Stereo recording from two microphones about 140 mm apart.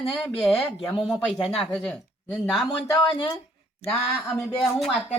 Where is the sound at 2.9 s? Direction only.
20° left (ahead or behind).